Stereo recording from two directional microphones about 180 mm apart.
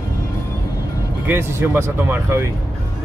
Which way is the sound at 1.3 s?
10° right (ahead or behind).